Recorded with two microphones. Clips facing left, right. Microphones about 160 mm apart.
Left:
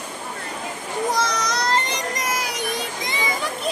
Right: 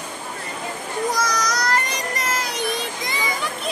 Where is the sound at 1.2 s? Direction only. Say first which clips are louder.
Even; 25° left (ahead or behind).